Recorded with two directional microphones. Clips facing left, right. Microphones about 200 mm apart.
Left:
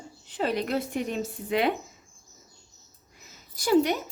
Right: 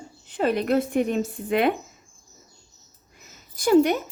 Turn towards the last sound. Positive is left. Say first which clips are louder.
# right 4 dB
turn(degrees=-50)  # may be behind; listen again after turning